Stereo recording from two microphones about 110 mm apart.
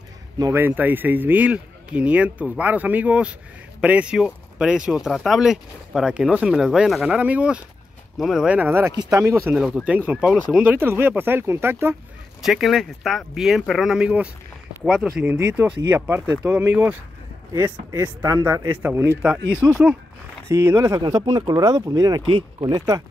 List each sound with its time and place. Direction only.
0.5 s speech: 20° right (ahead or behind); by 8.5 s 5° right (ahead or behind)
8.5 s speech: 20° right (ahead or behind)
9.8 s speech: 15° right (ahead or behind)
10.7 s speech: 20° right (ahead or behind)
12.4 s speech: 5° right (ahead or behind)
20.4 s speech: 25° right (ahead or behind)
21.0 s speech: 40° right (ahead or behind)